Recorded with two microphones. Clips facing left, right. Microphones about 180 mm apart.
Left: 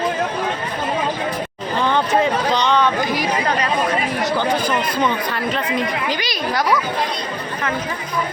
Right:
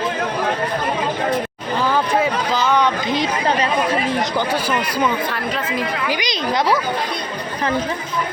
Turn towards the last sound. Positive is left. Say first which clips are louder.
# right 1 dB
turn(degrees=-25)  # may be behind; listen again after turning